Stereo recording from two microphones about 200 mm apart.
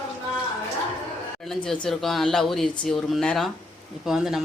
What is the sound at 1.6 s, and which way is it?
Speech, 5° left (ahead or behind).